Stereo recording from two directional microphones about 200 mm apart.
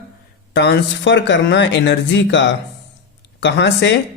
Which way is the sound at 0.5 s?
60° left (ahead or behind).